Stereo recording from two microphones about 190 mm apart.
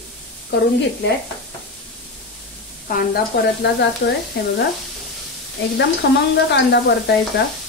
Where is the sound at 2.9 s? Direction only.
50° left (ahead or behind).